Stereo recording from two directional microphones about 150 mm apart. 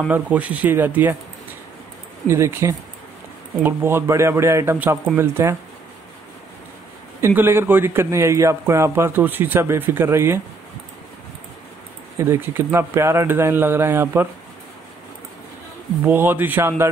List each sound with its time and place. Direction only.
0.1 s a man's voice: 10° right (ahead or behind)
2.2 s a man's voice: 15° right (ahead or behind)
7.2 s a man's voice: 15° right (ahead or behind)
12.2 s a man's voice: 15° right (ahead or behind)
16.0 s a man's voice: 15° right (ahead or behind)